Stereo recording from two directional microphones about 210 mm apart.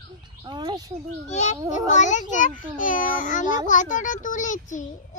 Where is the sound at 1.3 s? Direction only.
35° left (ahead or behind).